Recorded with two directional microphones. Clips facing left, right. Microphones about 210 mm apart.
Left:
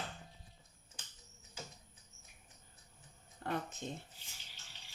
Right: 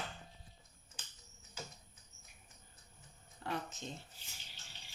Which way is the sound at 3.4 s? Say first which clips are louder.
Left 2 dB; 50° left (ahead or behind).